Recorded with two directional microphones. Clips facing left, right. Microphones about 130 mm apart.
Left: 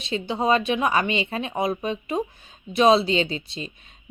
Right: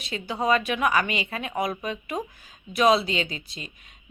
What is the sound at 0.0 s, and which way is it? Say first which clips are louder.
Speech: left 3 dB; 25° left (ahead or behind).